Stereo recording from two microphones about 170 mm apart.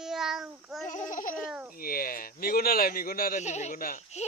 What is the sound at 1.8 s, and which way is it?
A man's voice, 60° left (ahead or behind).